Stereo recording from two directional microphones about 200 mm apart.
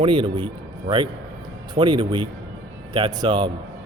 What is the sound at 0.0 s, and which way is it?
A man's voice, 25° right (ahead or behind).